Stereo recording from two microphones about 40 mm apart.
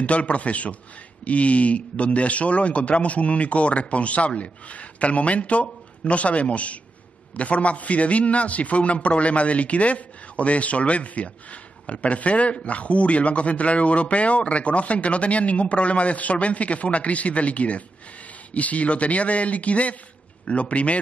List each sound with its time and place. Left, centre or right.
0.0 s a man's voice: left